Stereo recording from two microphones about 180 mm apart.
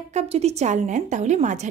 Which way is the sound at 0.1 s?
35° right (ahead or behind).